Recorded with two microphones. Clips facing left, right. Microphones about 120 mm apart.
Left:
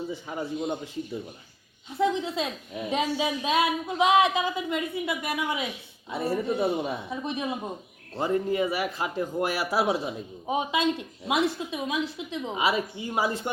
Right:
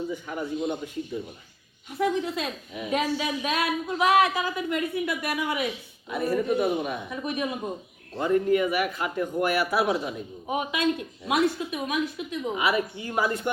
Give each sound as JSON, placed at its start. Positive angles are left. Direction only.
{"t": 0.1, "sound": "speech", "side_deg": 25}
{"t": 1.9, "sound": "speech", "side_deg": 25}